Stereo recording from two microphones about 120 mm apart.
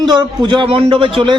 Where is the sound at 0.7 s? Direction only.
55° right (ahead or behind).